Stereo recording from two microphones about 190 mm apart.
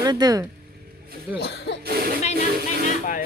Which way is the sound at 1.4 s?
60° left (ahead or behind).